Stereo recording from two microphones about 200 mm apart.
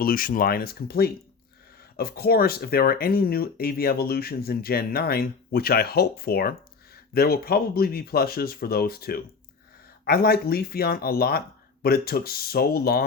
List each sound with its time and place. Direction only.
0.0 s speech: 45° left (ahead or behind)